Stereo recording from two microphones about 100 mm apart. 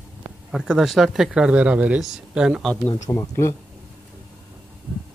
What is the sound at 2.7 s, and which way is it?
Speech, 15° left (ahead or behind).